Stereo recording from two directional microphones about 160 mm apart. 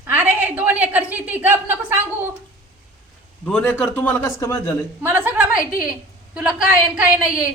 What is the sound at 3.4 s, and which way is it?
A man's voice, 5° left (ahead or behind).